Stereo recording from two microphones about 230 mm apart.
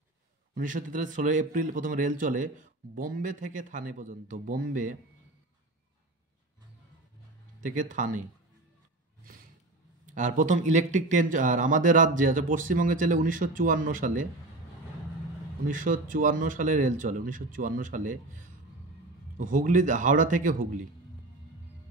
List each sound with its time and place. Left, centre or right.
0.6 s a man's voice: right
7.6 s a man's voice: right
10.0 s a man's voice: right
15.7 s a man's voice: right